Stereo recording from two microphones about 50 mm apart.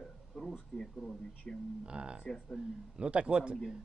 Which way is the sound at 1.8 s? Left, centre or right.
Centre.